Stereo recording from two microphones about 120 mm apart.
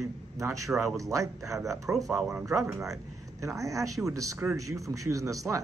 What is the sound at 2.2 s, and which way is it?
Speech, 10° right (ahead or behind).